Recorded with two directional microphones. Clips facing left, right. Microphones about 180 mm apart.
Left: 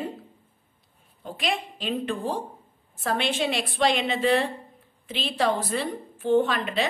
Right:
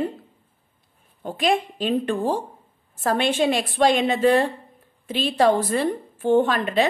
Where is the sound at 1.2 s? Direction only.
50° right (ahead or behind).